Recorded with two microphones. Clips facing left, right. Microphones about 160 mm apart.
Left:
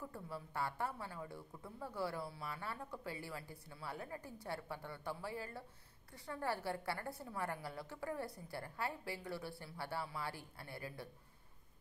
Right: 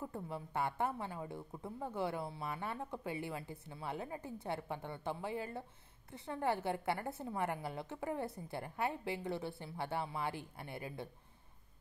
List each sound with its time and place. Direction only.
0.1 s a woman's voice: 20° right (ahead or behind)